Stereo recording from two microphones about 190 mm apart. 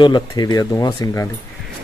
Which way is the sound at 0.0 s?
20° left (ahead or behind).